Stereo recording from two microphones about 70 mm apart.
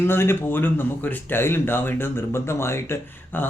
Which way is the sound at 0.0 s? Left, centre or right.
Left.